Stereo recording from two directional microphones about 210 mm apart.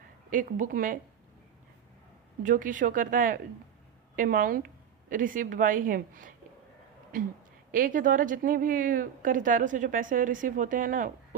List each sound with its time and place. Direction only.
0.3 s a woman's voice: 40° right (ahead or behind)
2.4 s a woman's voice: 40° right (ahead or behind)
7.7 s a woman's voice: 40° right (ahead or behind)